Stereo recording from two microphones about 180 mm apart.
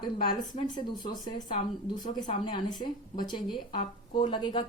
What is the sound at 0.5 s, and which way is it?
Speech, 25° left (ahead or behind).